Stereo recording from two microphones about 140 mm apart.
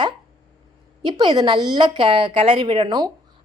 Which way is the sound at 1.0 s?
30° right (ahead or behind).